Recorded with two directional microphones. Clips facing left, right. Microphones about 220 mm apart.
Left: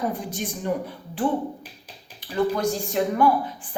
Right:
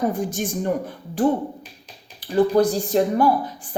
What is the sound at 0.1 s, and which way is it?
A woman's voice, 45° right (ahead or behind).